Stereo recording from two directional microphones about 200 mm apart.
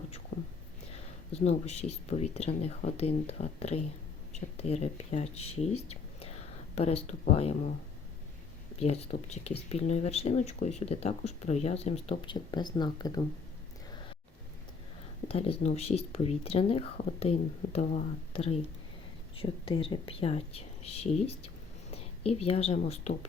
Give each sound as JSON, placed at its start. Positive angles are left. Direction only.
{"t": 1.3, "sound": "speech", "side_deg": 30}
{"t": 5.9, "sound": "whispering", "side_deg": 30}
{"t": 8.8, "sound": "speech", "side_deg": 30}
{"t": 15.3, "sound": "speech", "side_deg": 30}